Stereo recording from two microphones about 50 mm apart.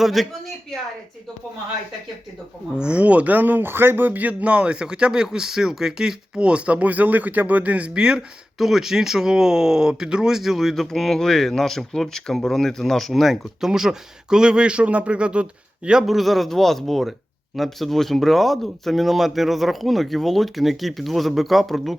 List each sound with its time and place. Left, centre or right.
0.0 s speech: centre
2.7 s speech: right
8.5 s speech: centre
16.0 s speech: centre